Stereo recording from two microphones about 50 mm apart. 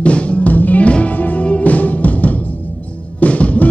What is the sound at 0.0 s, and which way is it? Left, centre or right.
Music, left.